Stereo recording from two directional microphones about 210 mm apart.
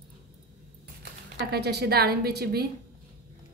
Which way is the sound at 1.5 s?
50° right (ahead or behind).